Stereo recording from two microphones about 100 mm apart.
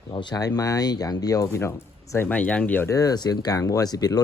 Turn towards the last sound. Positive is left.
turn(degrees=40)  # may be behind; listen again after turning